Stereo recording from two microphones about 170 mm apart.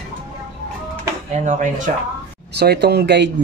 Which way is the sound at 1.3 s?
45° right (ahead or behind).